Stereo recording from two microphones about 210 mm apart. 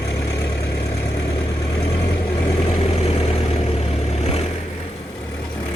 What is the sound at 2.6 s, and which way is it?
Vehicle, 25° left (ahead or behind).